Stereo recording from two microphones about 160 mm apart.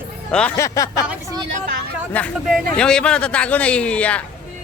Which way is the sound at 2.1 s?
10° left (ahead or behind).